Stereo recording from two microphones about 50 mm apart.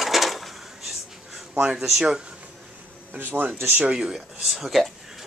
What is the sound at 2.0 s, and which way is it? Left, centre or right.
Speech, centre.